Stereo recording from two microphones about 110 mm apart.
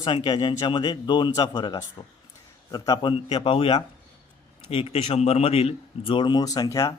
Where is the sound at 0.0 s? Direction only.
45° left (ahead or behind).